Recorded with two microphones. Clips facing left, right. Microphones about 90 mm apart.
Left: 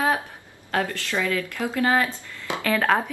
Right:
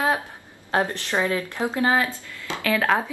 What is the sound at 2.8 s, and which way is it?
Speech, centre (ahead or behind).